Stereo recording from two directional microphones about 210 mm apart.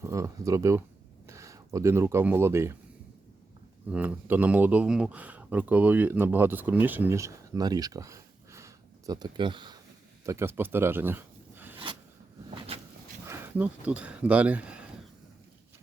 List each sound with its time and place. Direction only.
0.0 s speech: 15° right (ahead or behind)
3.9 s speech: 10° right (ahead or behind)
10.2 s speech: 10° right (ahead or behind)
12.5 s a sound: 30° right (ahead or behind)
13.2 s speech: 10° right (ahead or behind)